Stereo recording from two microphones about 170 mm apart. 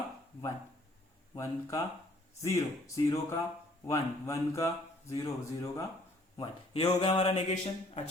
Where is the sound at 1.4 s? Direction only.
20° left (ahead or behind).